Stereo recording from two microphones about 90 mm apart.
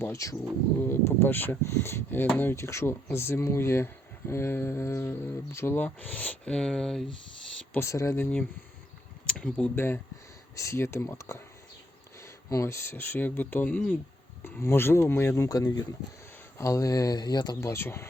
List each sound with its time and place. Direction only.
0.0 s speech: 35° left (ahead or behind); by 7.0 s 5° left (ahead or behind)
7.8 s speech: 30° left (ahead or behind)
8.2 s speech: 10° left (ahead or behind)
9.2 s a sound: 10° left (ahead or behind)
9.7 s speech: 25° left (ahead or behind)
14.4 s speech: 25° left (ahead or behind)
15.4 s speech: 45° left (ahead or behind)
16.6 s speech: 35° left (ahead or behind); by 17.6 s 50° left (ahead or behind)
17.6 s speech: 30° left (ahead or behind)